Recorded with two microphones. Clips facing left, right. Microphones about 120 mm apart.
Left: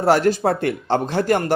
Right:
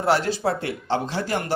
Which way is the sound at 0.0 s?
45° left (ahead or behind).